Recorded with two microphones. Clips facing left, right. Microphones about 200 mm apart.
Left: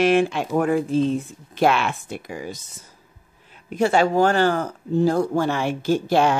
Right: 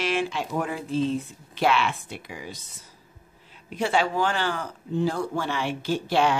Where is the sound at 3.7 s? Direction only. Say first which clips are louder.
Left 6 dB; 45° left (ahead or behind).